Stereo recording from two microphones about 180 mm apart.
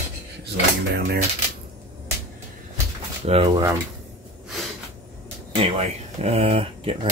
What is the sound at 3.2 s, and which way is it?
Speech, 35° right (ahead or behind).